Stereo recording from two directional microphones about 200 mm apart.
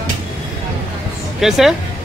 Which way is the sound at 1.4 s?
Centre (ahead or behind).